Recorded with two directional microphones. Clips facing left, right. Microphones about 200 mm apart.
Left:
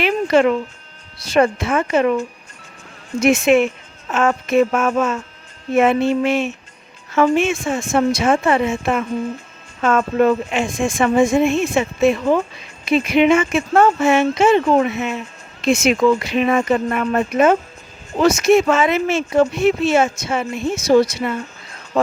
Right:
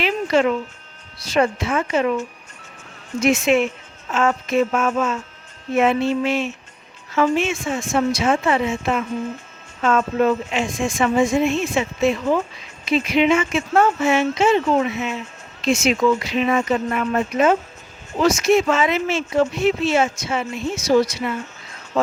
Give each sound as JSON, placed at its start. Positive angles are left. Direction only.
{"t": 0.0, "sound": "music", "side_deg": 55}
{"t": 1.3, "sound": "a woman's voice", "side_deg": 55}
{"t": 3.2, "sound": "a woman's voice", "side_deg": 50}